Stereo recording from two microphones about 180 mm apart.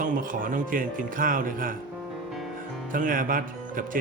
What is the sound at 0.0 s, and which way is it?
Speech, 50° right (ahead or behind).